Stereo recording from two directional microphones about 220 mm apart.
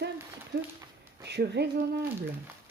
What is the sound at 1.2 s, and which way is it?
Speech, 50° right (ahead or behind).